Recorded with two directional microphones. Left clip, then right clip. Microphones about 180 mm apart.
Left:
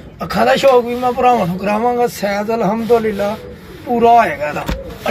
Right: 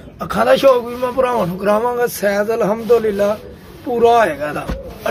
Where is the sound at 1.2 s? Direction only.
50° right (ahead or behind); by 4.6 s 35° right (ahead or behind).